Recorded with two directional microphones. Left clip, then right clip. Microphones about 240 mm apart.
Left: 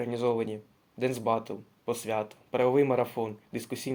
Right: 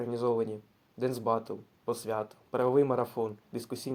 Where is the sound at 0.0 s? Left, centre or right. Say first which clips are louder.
Left 1 dB; right.